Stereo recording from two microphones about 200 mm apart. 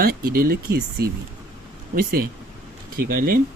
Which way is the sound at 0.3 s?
50° right (ahead or behind).